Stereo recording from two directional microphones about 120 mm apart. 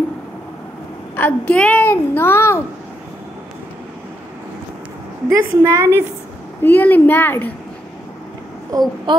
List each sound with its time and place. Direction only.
1.1 s a woman's voice: 15° left (ahead or behind)
5.3 s a woman's voice: 20° right (ahead or behind)
6.6 s a woman's voice: 15° left (ahead or behind)
8.7 s a woman's voice: 30° right (ahead or behind)